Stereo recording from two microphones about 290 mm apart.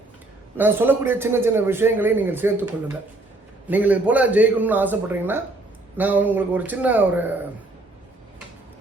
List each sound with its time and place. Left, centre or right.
0.5 s a man's voice: centre
3.7 s a man's voice: centre